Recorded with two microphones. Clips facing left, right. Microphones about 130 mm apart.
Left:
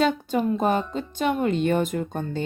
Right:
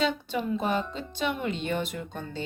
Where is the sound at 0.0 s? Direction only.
45° left (ahead or behind).